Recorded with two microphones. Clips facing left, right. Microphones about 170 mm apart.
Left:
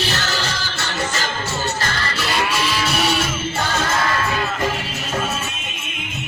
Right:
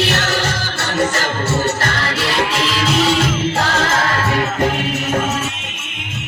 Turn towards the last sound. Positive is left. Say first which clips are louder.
# right 7 dB
turn(degrees=-65)  # may be behind; listen again after turning